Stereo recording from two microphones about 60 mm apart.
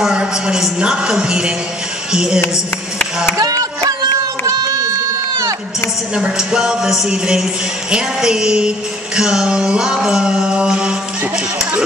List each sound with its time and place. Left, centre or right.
0.0 s music: centre
3.3 s music: right
4.5 s goat: right
6.1 s music: centre